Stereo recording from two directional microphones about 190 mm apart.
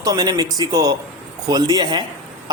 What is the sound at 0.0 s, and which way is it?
Speech, 20° right (ahead or behind).